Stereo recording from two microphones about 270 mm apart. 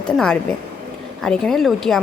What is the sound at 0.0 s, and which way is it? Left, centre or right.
Speech, centre.